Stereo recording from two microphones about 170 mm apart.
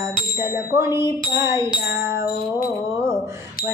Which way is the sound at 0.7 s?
15° right (ahead or behind).